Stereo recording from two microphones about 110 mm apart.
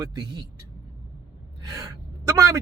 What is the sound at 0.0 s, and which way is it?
Speech, 35° right (ahead or behind).